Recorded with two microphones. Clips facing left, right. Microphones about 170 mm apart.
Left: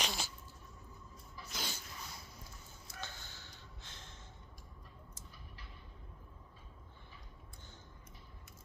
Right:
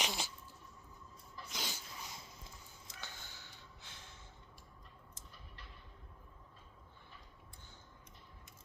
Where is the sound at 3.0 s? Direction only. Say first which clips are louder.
Even; 15° right (ahead or behind).